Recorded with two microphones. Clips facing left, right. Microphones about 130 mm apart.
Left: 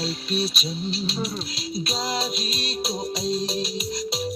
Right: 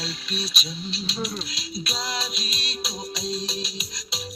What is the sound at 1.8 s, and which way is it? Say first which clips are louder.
Music: left 4 dB; 50° left (ahead or behind).